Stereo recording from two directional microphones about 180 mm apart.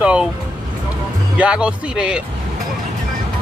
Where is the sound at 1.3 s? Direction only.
5° right (ahead or behind).